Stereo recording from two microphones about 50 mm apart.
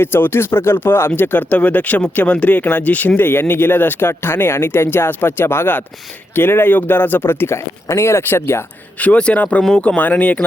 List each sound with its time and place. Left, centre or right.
0.0 s speech: left
1.1 s speech: left
2.6 s speech: left
3.2 s speech: left
9.0 s speech: left
10.0 s speech: left